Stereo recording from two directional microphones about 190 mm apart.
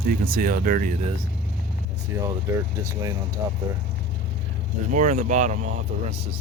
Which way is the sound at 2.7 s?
15° right (ahead or behind).